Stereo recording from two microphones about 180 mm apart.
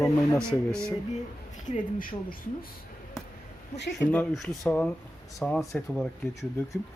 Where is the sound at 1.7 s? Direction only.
50° left (ahead or behind).